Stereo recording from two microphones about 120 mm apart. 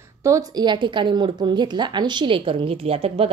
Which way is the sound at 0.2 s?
30° right (ahead or behind).